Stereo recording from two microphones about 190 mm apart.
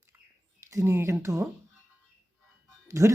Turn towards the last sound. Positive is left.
turn(degrees=-15)  # may be behind; listen again after turning